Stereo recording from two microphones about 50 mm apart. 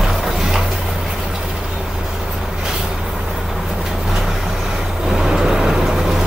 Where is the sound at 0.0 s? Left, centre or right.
Centre.